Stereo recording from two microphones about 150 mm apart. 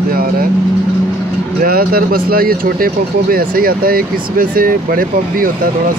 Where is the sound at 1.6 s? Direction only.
80° right.